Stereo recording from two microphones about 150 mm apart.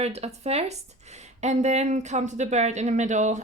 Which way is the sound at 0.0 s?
45° right (ahead or behind).